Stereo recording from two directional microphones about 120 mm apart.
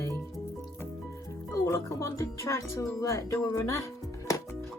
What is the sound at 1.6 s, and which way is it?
Speech, 25° left (ahead or behind).